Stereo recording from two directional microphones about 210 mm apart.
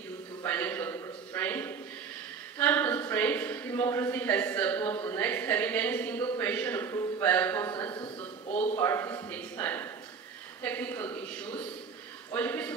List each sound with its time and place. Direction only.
0.4 s a sound: 10° left (ahead or behind)
2.6 s speech: 10° left (ahead or behind)
8.5 s a man's voice: 30° left (ahead or behind)
8.7 s speech: 10° left (ahead or behind)